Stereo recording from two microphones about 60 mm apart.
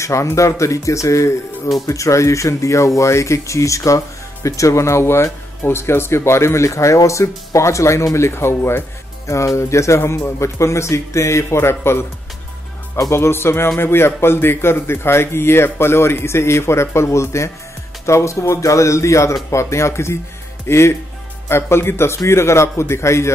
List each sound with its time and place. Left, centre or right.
0.0 s speech: left
9.3 s speech: left
13.1 s speech: left